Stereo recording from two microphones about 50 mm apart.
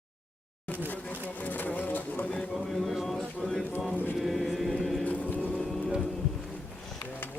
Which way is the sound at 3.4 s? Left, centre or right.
Left.